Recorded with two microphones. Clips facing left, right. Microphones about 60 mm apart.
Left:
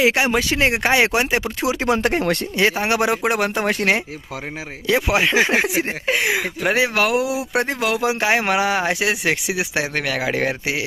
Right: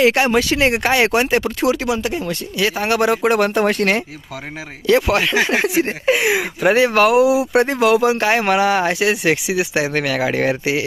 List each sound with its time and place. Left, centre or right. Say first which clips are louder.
0.0 s speech: right 3 dB; centre
1.9 s speech: left 2 dB; left
2.8 s speech: right 3 dB; centre
5.6 s speech: right 3 dB; centre
8.1 s speech: right 3 dB; centre